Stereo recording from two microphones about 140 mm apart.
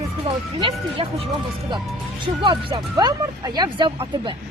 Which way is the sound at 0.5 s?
40° right (ahead or behind).